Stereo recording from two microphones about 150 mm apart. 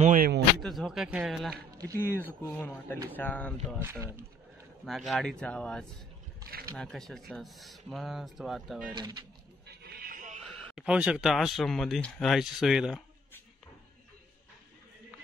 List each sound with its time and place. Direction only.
0.0 s speech: 60° right (ahead or behind)
0.6 s speech: centre (ahead or behind)
2.0 s speech: 15° left (ahead or behind)
3.8 s speech: 15° right (ahead or behind)
4.8 s speech: centre (ahead or behind)
8.9 s speech: 30° right (ahead or behind)
9.7 s a sound: 90° right; by 10.4 s 60° right (ahead or behind)
10.7 s speech: 5° right (ahead or behind)